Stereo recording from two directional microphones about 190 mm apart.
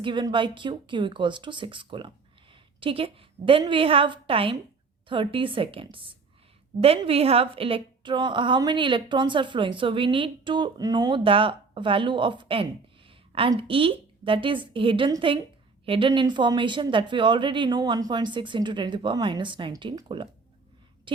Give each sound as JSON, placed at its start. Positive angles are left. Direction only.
{"t": 0.0, "sound": "a woman's voice", "side_deg": -25}